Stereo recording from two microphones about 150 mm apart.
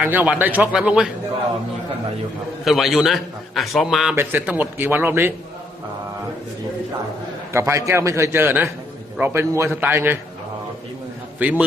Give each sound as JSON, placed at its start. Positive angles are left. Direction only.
{"t": 0.0, "sound": "a man's voice", "side_deg": -10}
{"t": 2.6, "sound": "a man's voice", "side_deg": 0}
{"t": 4.1, "sound": "a man's voice", "side_deg": -15}
{"t": 7.5, "sound": "a man's voice", "side_deg": -20}
{"t": 11.3, "sound": "a man's voice", "side_deg": -10}